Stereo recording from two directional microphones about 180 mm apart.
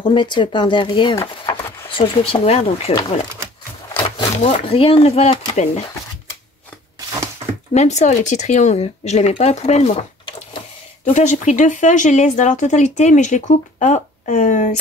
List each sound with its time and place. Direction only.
0.0 s speech: 25° left (ahead or behind)
4.2 s speech: 35° left (ahead or behind)
7.7 s speech: 40° left (ahead or behind)
11.1 s speech: 40° left (ahead or behind)